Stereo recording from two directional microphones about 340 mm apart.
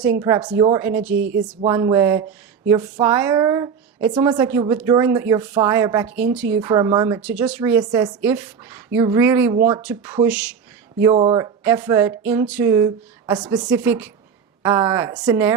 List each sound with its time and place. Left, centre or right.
0.2 s speech: centre
1.1 s speech: right
1.5 s speech: centre